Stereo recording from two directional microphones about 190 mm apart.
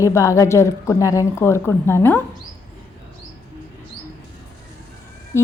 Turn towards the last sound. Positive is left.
turn(degrees=15)  # may be behind; listen again after turning